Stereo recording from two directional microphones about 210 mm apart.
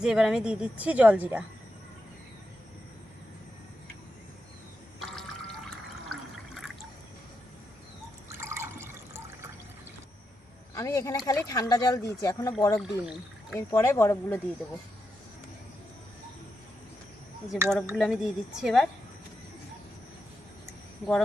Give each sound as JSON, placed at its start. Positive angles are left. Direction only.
{"t": 0.0, "sound": "a woman's voice", "side_deg": -5}
{"t": 4.9, "sound": "water", "side_deg": 0}
{"t": 8.4, "sound": "water", "side_deg": -10}
{"t": 10.8, "sound": "speech", "side_deg": 15}
{"t": 17.5, "sound": "a woman's voice", "side_deg": 0}